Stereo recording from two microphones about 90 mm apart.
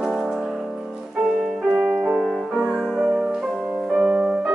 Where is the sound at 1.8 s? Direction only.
15° right (ahead or behind).